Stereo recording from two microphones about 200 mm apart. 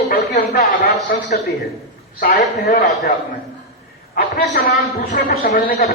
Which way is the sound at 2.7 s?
40° left (ahead or behind).